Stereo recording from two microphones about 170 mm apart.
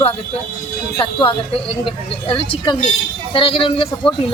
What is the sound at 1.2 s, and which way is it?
A woman's voice, 30° left (ahead or behind).